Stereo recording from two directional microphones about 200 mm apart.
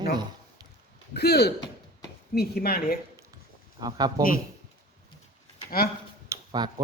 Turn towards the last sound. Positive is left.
turn(degrees=-20)  # may be behind; listen again after turning